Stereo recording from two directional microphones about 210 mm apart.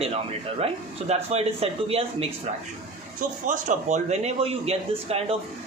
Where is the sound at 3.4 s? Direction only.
35° right (ahead or behind).